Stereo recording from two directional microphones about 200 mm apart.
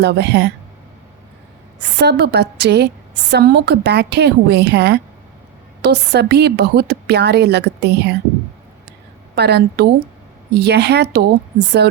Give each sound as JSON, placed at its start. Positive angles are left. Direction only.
{"t": 0.0, "sound": "a woman's voice", "side_deg": -55}
{"t": 2.0, "sound": "a woman's voice", "side_deg": -55}
{"t": 9.3, "sound": "a woman's voice", "side_deg": -55}